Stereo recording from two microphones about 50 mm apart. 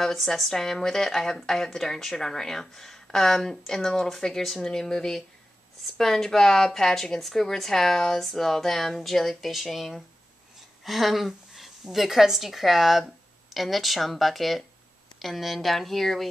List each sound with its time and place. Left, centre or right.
0.0 s a woman's voice: centre